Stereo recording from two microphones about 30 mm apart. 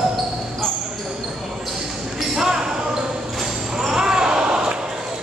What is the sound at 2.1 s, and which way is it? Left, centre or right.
Basketball bounce, centre.